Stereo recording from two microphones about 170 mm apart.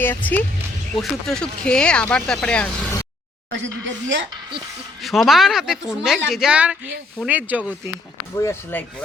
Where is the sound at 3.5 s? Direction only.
90° right.